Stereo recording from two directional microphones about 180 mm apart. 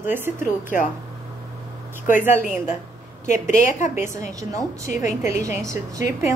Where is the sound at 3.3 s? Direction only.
45° left (ahead or behind).